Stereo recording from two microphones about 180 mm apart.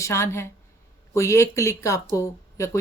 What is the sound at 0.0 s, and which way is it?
Speech, 15° left (ahead or behind).